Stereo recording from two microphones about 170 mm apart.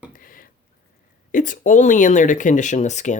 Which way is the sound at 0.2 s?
55° left (ahead or behind).